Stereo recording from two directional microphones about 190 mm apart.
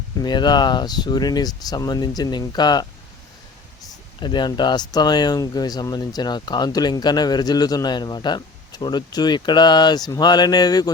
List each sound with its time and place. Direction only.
0.2 s speech: 20° left (ahead or behind)
4.2 s speech: 25° left (ahead or behind)